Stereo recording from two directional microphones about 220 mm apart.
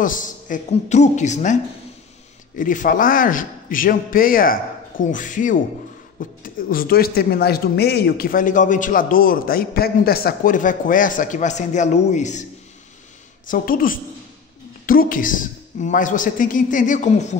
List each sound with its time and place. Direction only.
0.0 s a man's voice: 35° left (ahead or behind)
13.5 s a man's voice: 40° left (ahead or behind)